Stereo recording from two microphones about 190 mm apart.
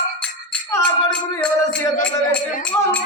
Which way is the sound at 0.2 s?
5° left (ahead or behind).